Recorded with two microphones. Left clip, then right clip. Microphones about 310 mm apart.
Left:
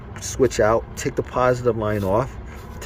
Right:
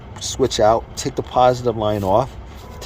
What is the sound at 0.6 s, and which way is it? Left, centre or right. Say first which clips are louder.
Speech: right 3 dB; right.